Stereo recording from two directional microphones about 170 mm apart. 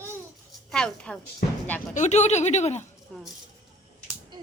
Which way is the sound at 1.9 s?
45° left (ahead or behind).